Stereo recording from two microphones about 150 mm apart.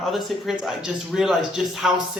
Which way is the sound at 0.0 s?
Centre (ahead or behind).